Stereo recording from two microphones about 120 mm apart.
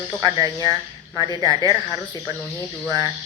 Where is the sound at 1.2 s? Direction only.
35° left (ahead or behind).